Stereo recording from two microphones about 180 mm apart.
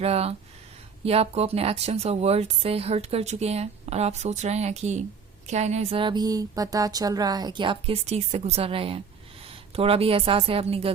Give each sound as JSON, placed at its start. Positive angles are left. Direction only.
{"t": 0.0, "sound": "speech", "side_deg": -35}